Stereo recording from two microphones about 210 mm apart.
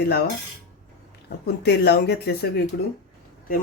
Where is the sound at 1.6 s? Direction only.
50° left (ahead or behind).